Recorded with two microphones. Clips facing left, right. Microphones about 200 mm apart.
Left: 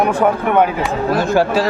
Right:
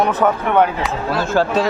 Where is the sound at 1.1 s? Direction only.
15° left (ahead or behind).